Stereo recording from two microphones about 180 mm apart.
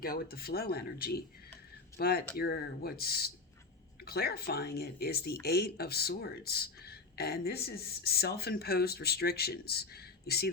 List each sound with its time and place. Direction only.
0.0 s speech: 55° left (ahead or behind)